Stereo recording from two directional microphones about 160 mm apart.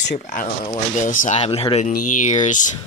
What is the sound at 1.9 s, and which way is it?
Speech, 50° left (ahead or behind).